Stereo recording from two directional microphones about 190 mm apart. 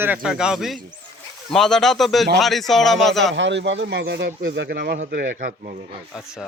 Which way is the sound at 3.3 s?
70° right (ahead or behind).